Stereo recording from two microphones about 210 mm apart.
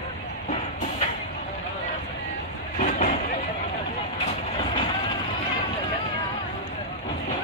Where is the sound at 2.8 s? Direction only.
35° left (ahead or behind).